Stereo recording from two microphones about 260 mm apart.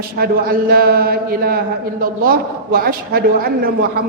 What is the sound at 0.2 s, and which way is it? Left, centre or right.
A man's voice, right.